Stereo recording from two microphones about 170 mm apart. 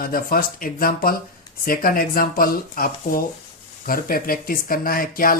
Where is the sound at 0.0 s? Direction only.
60° left (ahead or behind).